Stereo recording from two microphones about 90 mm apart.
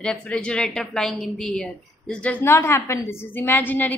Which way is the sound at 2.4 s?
30° left (ahead or behind).